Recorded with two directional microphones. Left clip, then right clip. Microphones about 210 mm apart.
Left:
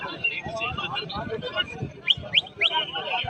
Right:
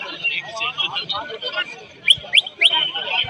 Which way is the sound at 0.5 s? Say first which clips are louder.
Right 6 dB; 40° left (ahead or behind).